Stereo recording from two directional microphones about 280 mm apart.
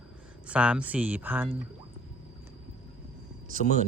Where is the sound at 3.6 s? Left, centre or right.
Left.